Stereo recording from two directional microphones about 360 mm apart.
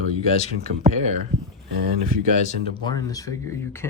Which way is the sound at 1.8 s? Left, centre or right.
Right.